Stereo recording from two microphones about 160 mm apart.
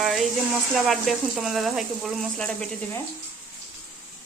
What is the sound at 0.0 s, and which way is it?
A woman's voice, centre (ahead or behind).